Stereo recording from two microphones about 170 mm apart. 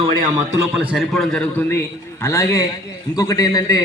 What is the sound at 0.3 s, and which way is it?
Speech, 15° right (ahead or behind).